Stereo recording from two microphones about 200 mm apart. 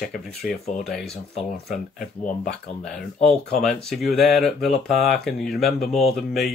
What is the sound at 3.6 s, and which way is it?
Speech, centre (ahead or behind).